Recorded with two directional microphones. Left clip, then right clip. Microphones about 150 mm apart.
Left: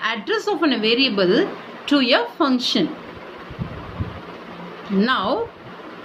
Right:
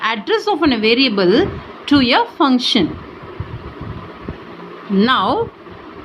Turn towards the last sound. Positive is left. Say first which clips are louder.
# right 5 dB
turn(degrees=-45)  # may be behind; listen again after turning